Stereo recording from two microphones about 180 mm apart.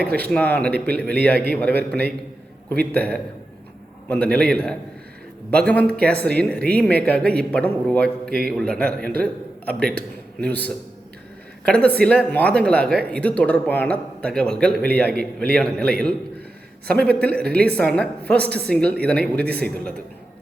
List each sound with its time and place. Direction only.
0.0 s speech: 60° right (ahead or behind)
0.3 s a woman's voice: 5° left (ahead or behind)
11.6 s a woman's voice: 5° left (ahead or behind)